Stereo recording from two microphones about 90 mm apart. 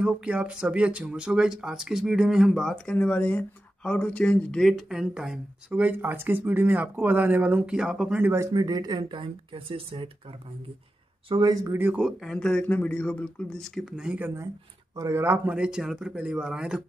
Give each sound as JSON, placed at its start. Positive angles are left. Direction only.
{"t": 0.0, "sound": "speech", "side_deg": -10}
{"t": 2.7, "sound": "speech", "side_deg": 10}
{"t": 5.7, "sound": "speech", "side_deg": -20}
{"t": 8.2, "sound": "speech", "side_deg": -25}
{"t": 8.5, "sound": "speech", "side_deg": -45}
{"t": 11.4, "sound": "speech", "side_deg": -45}
{"t": 11.9, "sound": "speech", "side_deg": -5}
{"t": 13.9, "sound": "speech", "side_deg": -15}
{"t": 15.0, "sound": "speech", "side_deg": -25}
{"t": 15.5, "sound": "speech", "side_deg": -10}